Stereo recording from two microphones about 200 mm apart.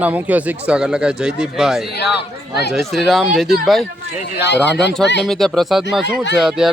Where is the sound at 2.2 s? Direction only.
55° left (ahead or behind).